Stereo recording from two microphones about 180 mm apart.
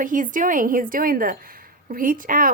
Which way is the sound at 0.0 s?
45° right (ahead or behind).